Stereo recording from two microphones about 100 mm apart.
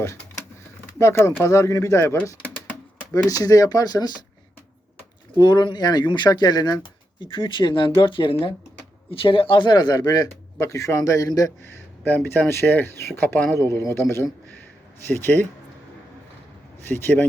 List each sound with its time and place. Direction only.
0.9 s speech: 30° left (ahead or behind)
3.2 s a man's voice: 35° left (ahead or behind)
5.4 s speech: 50° left (ahead or behind)
7.2 s speech: 55° left (ahead or behind)
10.6 s a man's voice: 30° left (ahead or behind)
11.6 s speech: 20° left (ahead or behind)
16.9 s speech: 20° left (ahead or behind)